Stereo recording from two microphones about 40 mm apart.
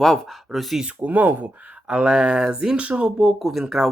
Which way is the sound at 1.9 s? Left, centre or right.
Right.